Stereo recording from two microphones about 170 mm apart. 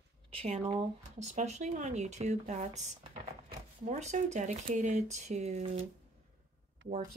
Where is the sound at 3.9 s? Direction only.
45° right (ahead or behind).